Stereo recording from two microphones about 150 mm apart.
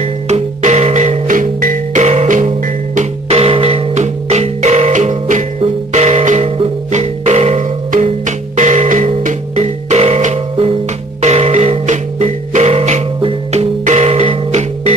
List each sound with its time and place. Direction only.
0.0 s music: 50° right (ahead or behind)
3.0 s music: 40° right (ahead or behind)
5.6 s music: 45° right (ahead or behind)